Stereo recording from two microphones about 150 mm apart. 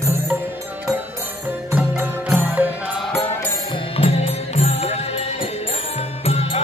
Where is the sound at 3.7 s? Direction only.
35° left (ahead or behind).